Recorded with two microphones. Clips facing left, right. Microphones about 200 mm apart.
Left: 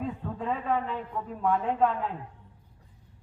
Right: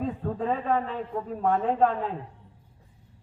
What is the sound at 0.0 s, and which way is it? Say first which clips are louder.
A man's voice: right 4 dB; 40° right (ahead or behind).